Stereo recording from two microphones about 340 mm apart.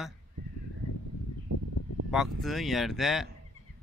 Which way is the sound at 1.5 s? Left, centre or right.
Right.